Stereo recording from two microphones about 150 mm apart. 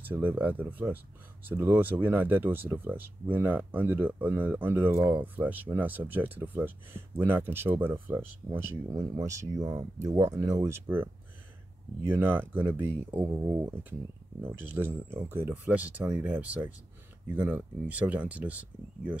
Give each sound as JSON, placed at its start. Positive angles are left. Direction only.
{"t": 0.0, "sound": "speech", "side_deg": -10}
{"t": 12.1, "sound": "speech", "side_deg": -15}